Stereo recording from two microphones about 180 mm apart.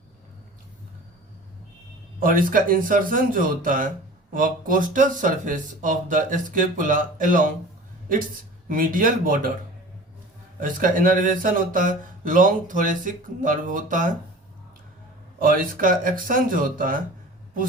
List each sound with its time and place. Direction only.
2.1 s speech: 50° right (ahead or behind)
8.7 s speech: 50° right (ahead or behind)
10.6 s speech: 50° right (ahead or behind)
15.4 s speech: 50° right (ahead or behind)